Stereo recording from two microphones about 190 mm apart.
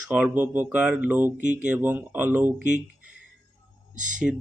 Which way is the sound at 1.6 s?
10° right (ahead or behind).